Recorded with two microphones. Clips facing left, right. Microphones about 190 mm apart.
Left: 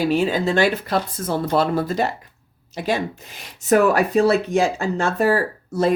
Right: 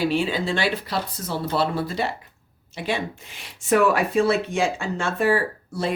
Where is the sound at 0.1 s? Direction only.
45° left (ahead or behind).